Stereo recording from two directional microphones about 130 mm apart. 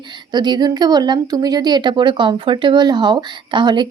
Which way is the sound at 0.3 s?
35° right (ahead or behind).